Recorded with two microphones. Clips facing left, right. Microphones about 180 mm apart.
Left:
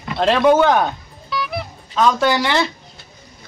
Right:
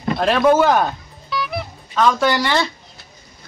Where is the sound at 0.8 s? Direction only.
Centre (ahead or behind).